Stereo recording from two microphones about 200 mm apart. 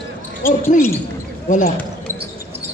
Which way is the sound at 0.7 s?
40° left (ahead or behind).